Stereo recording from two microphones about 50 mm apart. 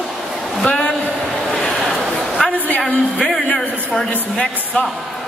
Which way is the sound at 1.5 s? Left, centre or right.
Centre.